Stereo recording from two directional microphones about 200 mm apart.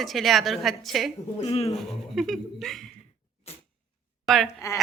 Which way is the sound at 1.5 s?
30° left (ahead or behind).